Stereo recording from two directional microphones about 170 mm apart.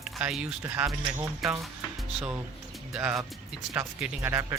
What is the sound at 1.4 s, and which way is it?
Speech, centre (ahead or behind).